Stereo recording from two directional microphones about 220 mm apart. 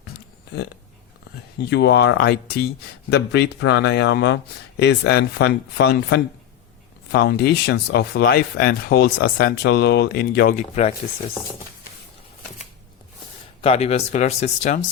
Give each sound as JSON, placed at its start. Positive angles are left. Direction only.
{"t": 1.7, "sound": "speech", "side_deg": 50}
{"t": 10.6, "sound": "speech", "side_deg": 30}
{"t": 13.6, "sound": "speech", "side_deg": 25}